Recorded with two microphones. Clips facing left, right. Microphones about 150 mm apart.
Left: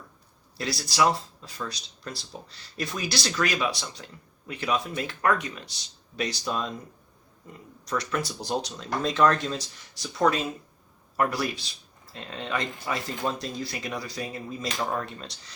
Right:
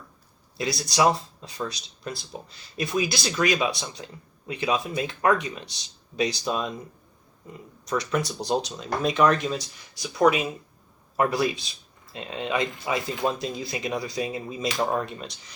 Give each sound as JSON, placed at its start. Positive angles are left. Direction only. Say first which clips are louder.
{"t": 0.5, "sound": "speech", "louder": "right 3 dB", "side_deg": -20}
{"t": 7.9, "sound": "speech", "louder": "right 3 dB", "side_deg": -20}